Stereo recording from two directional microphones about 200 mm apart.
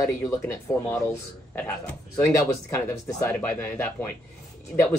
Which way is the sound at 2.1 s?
15° left (ahead or behind).